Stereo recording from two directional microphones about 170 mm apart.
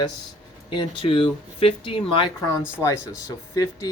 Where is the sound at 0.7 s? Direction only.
30° left (ahead or behind).